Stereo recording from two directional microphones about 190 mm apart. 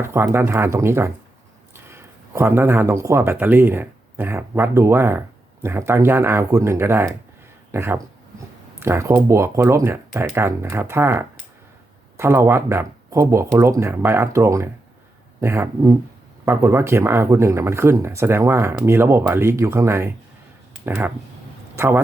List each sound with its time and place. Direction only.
0.0 s speech: 15° right (ahead or behind)